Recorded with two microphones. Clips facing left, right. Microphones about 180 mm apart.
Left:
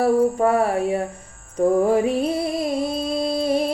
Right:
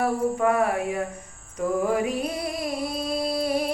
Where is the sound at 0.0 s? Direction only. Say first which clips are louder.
Left 5 dB; 35° left (ahead or behind).